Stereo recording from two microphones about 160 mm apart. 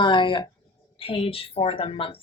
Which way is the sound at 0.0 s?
30° left (ahead or behind).